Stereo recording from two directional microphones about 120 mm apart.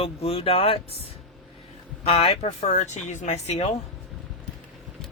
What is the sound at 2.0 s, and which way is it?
Speech, 55° left (ahead or behind).